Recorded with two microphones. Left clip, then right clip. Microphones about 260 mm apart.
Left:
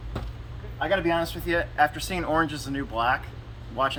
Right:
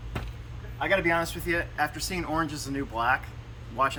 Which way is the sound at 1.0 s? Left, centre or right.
Centre.